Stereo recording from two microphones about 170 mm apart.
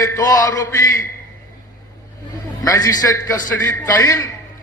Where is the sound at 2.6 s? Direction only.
20° left (ahead or behind).